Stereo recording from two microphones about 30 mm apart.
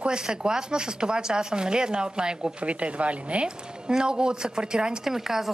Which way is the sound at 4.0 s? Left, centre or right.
Right.